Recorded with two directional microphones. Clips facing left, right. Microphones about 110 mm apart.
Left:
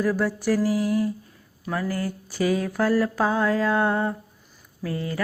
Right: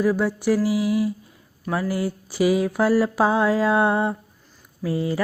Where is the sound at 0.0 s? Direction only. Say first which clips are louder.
Right 3 dB; centre (ahead or behind).